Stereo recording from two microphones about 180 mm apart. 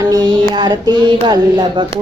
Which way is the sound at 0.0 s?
20° right (ahead or behind).